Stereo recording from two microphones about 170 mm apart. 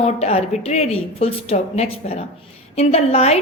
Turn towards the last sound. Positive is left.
turn(degrees=40)  # may be behind; listen again after turning